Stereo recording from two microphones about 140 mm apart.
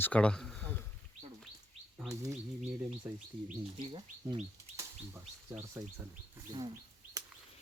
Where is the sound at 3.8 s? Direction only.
35° right (ahead or behind).